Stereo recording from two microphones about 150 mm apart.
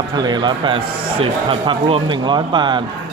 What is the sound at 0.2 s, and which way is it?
Speech, 30° right (ahead or behind).